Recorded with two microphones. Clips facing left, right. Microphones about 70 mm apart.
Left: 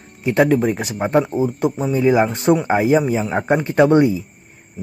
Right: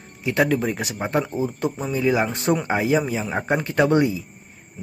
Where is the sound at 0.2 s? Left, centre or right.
Left.